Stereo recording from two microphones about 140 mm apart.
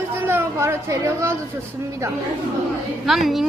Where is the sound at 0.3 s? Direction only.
15° right (ahead or behind).